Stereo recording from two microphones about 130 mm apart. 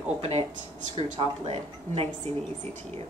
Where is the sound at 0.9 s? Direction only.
45° right (ahead or behind).